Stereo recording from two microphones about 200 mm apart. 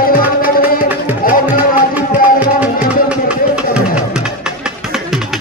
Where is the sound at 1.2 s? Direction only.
45° left (ahead or behind).